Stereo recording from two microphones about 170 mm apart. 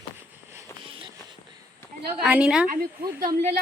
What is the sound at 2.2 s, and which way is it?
Speech, 5° right (ahead or behind).